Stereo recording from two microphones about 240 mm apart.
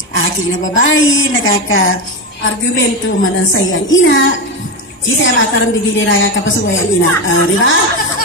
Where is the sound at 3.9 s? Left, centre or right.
Left.